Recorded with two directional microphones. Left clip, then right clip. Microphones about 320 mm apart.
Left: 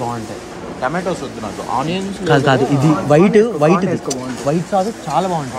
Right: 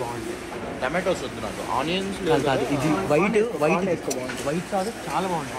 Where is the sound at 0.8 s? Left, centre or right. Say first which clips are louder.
Left 5 dB; left.